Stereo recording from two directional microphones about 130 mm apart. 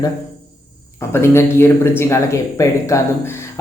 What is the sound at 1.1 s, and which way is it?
Speech, 20° left (ahead or behind).